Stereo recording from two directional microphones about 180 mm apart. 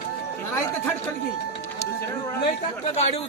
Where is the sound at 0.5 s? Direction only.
10° left (ahead or behind).